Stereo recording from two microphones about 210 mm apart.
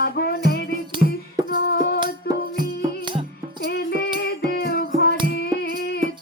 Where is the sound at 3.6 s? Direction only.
50° left (ahead or behind).